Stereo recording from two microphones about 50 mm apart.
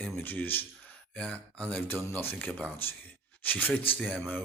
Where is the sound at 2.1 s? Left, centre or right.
Left.